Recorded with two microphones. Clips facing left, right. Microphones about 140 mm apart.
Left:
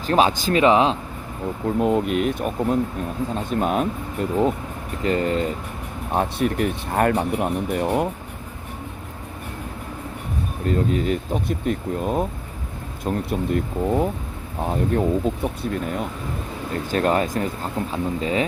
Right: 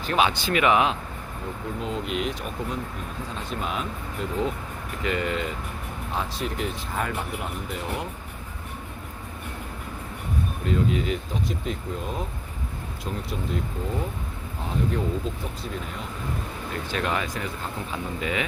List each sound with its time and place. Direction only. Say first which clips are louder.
0.0 s speech: left 5 dB; 35° left (ahead or behind)
1.8 s speech: left 9 dB; 55° left (ahead or behind)
5.0 s speech: left 6 dB; 40° left (ahead or behind)
6.1 s speech: left 9 dB; 55° left (ahead or behind)
10.7 s speech: left 4 dB; 45° left (ahead or behind)
16.7 s speech: left 8 dB; 40° left (ahead or behind)
17.9 s speech: left 6 dB; 30° left (ahead or behind)